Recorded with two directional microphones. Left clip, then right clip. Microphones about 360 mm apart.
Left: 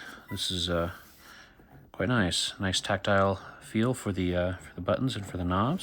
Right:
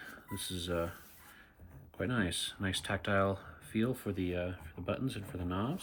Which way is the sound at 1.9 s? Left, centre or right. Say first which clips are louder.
Left 8 dB; centre.